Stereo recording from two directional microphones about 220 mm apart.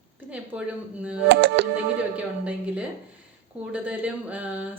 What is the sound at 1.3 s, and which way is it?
Music, 55° right (ahead or behind).